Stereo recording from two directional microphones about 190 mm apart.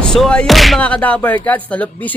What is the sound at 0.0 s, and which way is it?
Speech, 5° left (ahead or behind).